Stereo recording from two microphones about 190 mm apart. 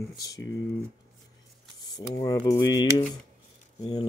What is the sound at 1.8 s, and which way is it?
Speech, 20° left (ahead or behind).